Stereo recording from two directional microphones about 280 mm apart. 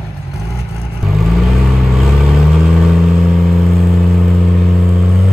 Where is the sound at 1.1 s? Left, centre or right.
Centre.